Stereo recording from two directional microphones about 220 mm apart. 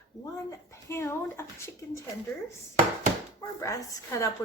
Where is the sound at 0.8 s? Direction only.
10° left (ahead or behind).